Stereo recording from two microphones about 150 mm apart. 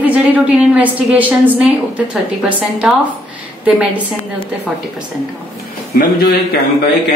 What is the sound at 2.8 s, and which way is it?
Speech, 5° right (ahead or behind).